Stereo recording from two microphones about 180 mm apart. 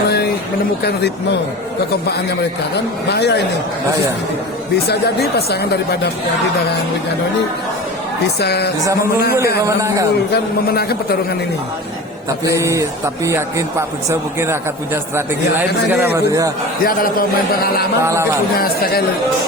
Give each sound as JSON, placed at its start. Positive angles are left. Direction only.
{"t": 3.1, "sound": "speech", "side_deg": 70}
{"t": 4.9, "sound": "speech", "side_deg": 65}
{"t": 8.4, "sound": "speech", "side_deg": 65}
{"t": 9.6, "sound": "a man's voice", "side_deg": -20}
{"t": 10.3, "sound": "speech", "side_deg": 60}
{"t": 12.5, "sound": "a man's voice", "side_deg": -15}
{"t": 15.9, "sound": "a man's voice", "side_deg": -10}
{"t": 16.8, "sound": "a man's voice", "side_deg": 50}
{"t": 18.0, "sound": "a man's voice", "side_deg": -15}
{"t": 18.5, "sound": "speech", "side_deg": 55}